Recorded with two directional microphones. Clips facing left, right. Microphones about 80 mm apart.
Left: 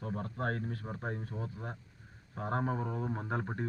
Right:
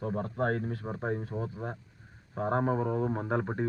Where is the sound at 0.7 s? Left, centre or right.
Right.